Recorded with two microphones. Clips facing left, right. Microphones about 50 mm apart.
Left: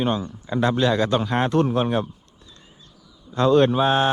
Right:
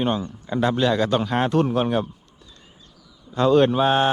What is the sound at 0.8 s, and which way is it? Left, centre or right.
Speech, left.